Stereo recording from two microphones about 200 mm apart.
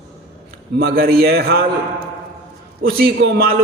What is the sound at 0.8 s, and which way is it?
Speech, 50° right (ahead or behind).